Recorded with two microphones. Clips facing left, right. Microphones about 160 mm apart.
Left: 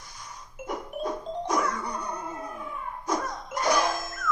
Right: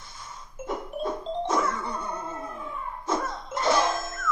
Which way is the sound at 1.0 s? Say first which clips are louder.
Right 2 dB; 15° left (ahead or behind).